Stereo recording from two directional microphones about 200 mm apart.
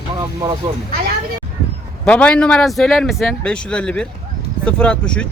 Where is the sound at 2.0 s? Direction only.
5° left (ahead or behind).